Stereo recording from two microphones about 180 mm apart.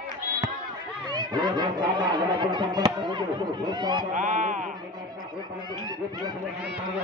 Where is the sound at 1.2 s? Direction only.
25° right (ahead or behind).